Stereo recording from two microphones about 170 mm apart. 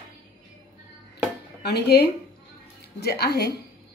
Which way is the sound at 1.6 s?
75° left (ahead or behind).